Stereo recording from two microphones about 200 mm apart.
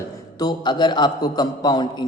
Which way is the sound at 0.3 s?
20° left (ahead or behind).